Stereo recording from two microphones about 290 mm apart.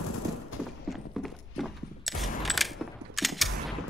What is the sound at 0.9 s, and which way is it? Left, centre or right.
Walk, centre.